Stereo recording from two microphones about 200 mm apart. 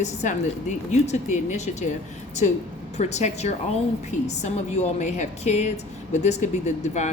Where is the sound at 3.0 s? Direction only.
35° left (ahead or behind).